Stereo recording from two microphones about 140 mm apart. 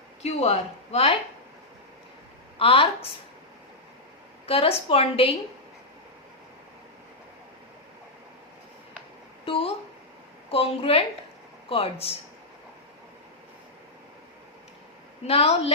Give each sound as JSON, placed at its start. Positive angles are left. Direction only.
{"t": 0.2, "sound": "a woman's voice", "side_deg": 50}
{"t": 2.6, "sound": "speech", "side_deg": 40}
{"t": 4.4, "sound": "a woman's voice", "side_deg": 45}
{"t": 9.5, "sound": "a woman's voice", "side_deg": 45}
{"t": 15.3, "sound": "a woman's voice", "side_deg": 45}